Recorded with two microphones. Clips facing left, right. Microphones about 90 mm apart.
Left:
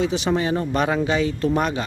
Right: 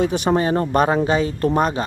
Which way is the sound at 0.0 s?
45° right (ahead or behind).